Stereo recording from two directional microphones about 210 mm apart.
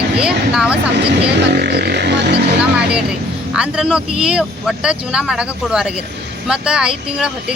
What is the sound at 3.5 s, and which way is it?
Speech, 5° right (ahead or behind).